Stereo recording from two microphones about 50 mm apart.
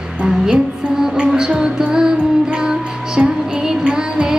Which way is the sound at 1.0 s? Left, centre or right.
Centre.